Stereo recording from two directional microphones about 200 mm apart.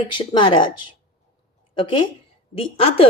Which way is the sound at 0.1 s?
25° left (ahead or behind).